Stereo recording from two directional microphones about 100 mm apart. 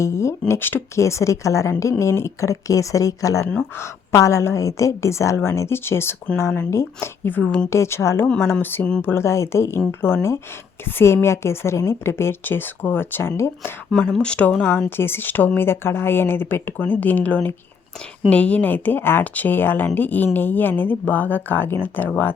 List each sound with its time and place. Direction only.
0.0 s speech: 30° left (ahead or behind)
3.4 s speech: 10° left (ahead or behind)
3.8 s speech: 30° left (ahead or behind)
13.9 s speech: 10° left (ahead or behind)